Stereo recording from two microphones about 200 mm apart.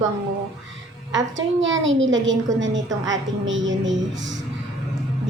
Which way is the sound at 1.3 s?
70° right (ahead or behind).